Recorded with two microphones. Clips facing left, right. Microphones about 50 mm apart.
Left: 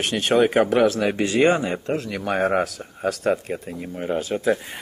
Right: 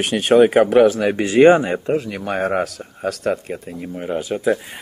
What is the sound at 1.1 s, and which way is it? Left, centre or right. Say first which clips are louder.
Speech: right 7 dB; centre.